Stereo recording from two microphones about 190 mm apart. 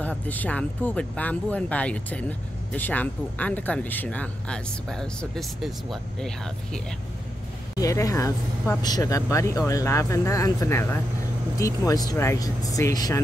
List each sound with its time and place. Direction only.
0.0 s speech: 10° left (ahead or behind)
7.7 s speech: 15° left (ahead or behind)